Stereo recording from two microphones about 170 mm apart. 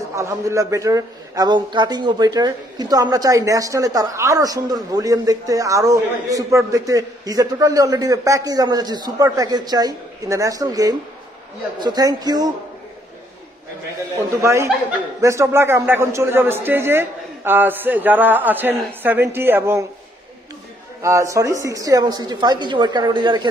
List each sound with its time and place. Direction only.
0.1 s a man's voice: 15° right (ahead or behind)
14.4 s a man's voice: 15° right (ahead or behind)
21.0 s a man's voice: 15° right (ahead or behind)